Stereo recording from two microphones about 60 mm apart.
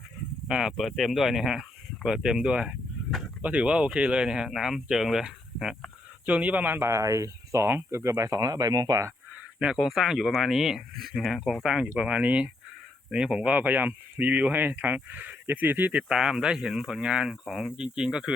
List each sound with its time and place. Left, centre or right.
0.4 s speech: centre
0.8 s speech: centre
3.1 s a sound: centre
3.4 s speech: right
6.2 s speech: right
6.7 s speech: right
7.0 s speech: right
7.7 s speech: right
9.3 s a sound: centre
9.8 s speech: centre; by 15.9 s right
15.9 s speech: centre